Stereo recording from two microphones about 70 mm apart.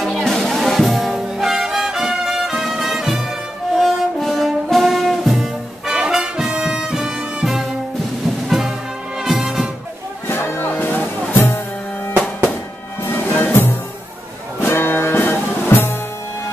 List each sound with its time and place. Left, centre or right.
0.2 s music: centre
10.2 s music: left
13.0 s music: left